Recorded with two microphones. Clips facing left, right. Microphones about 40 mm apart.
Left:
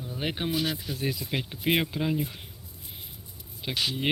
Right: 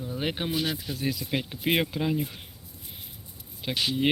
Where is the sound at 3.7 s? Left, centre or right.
Right.